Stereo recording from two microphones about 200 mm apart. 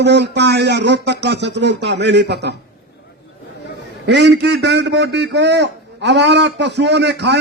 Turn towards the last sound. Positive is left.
turn(degrees=-60)  # may be behind; listen again after turning